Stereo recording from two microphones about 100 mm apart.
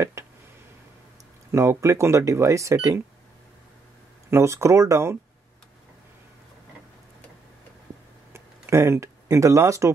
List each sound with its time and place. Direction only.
0.2 s a sound: 30° right (ahead or behind)
1.5 s speech: 30° right (ahead or behind)
4.3 s speech: 30° right (ahead or behind)
8.3 s speech: 25° right (ahead or behind)